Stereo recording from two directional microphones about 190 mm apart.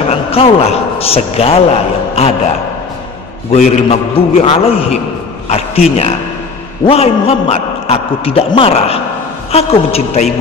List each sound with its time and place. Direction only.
0.1 s a man's voice: 30° left (ahead or behind)
3.6 s a man's voice: 35° left (ahead or behind)